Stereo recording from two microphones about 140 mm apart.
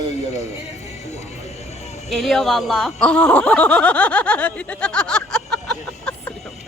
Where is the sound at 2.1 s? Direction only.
Centre (ahead or behind).